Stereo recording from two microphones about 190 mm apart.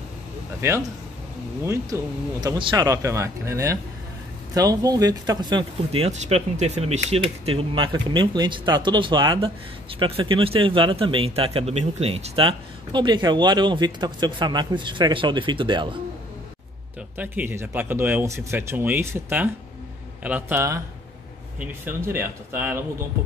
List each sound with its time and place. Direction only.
0.6 s speech: 15° right (ahead or behind)
17.2 s speech: 10° right (ahead or behind)